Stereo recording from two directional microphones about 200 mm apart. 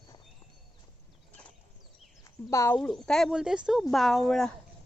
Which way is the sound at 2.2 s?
15° left (ahead or behind).